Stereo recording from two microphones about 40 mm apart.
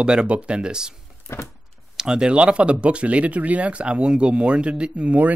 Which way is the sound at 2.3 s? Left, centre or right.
Right.